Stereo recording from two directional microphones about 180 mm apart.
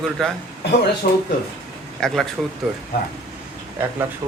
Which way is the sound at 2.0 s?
Centre (ahead or behind).